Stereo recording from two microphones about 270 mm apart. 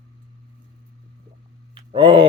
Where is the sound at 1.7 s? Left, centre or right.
Centre.